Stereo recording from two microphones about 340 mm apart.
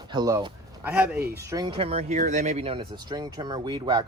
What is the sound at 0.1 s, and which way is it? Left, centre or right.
Speech, centre.